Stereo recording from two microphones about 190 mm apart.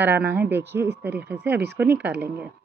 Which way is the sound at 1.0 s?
10° right (ahead or behind).